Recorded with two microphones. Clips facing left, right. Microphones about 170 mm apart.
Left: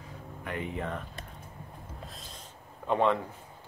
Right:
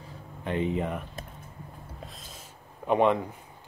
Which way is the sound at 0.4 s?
25° right (ahead or behind).